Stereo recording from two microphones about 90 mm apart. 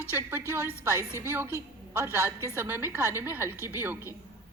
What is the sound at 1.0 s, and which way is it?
Speech, 30° left (ahead or behind).